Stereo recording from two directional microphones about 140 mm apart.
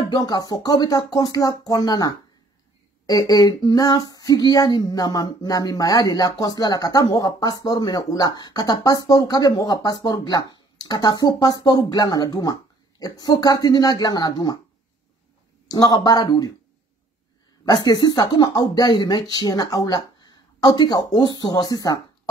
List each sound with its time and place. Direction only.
0.0 s female singing: 30° left (ahead or behind)
15.7 s female singing: 30° left (ahead or behind)
17.6 s female singing: 30° left (ahead or behind)